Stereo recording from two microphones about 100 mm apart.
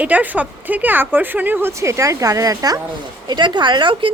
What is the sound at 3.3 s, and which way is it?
Speech, 50° right (ahead or behind).